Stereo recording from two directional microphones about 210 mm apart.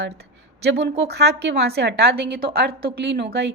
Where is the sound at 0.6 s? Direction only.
55° right (ahead or behind).